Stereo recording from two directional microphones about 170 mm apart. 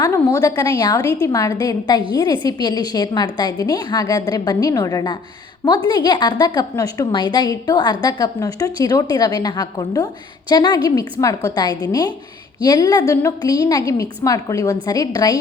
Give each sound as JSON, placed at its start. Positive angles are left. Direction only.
{"t": 0.0, "sound": "a woman's voice", "side_deg": 20}